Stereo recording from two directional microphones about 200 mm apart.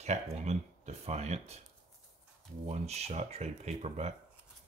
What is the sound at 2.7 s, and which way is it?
Speech, 30° right (ahead or behind).